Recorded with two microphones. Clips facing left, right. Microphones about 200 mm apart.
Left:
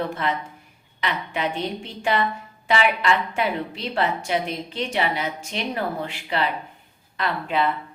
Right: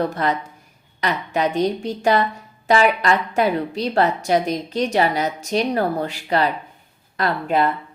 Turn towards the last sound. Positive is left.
turn(degrees=-40)  # may be behind; listen again after turning